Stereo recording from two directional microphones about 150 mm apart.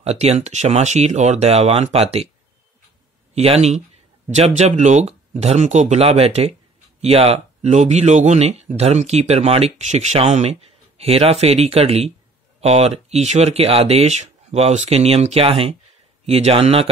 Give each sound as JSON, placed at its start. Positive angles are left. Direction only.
{"t": 0.0, "sound": "speech", "side_deg": -45}
{"t": 3.3, "sound": "speech", "side_deg": -45}